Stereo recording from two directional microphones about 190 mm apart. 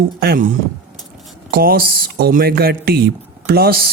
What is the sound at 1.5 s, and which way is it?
Speech, 50° right (ahead or behind).